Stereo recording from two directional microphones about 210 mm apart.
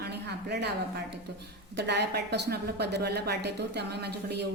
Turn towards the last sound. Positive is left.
turn(degrees=-50)  # may be behind; listen again after turning